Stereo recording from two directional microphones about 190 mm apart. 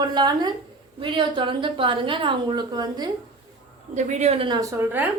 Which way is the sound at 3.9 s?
35° right (ahead or behind).